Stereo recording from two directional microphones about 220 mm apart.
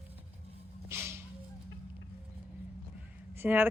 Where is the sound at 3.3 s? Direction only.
10° right (ahead or behind).